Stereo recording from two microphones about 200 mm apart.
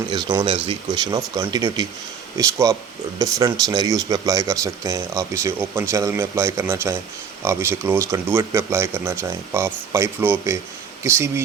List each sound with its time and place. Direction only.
0.1 s speech: 20° right (ahead or behind)